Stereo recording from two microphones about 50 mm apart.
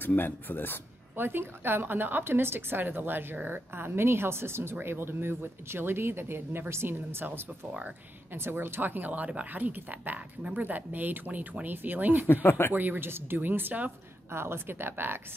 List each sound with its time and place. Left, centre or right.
0.0 s speech: left
1.1 s a woman's voice: right
12.4 s speech: left
12.7 s a woman's voice: right
14.3 s a woman's voice: right